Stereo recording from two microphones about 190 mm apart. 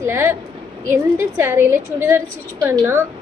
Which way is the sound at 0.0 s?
15° right (ahead or behind).